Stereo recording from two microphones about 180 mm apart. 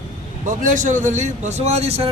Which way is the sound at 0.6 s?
45° right (ahead or behind).